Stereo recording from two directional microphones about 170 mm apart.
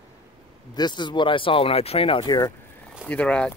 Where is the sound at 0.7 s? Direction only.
25° left (ahead or behind).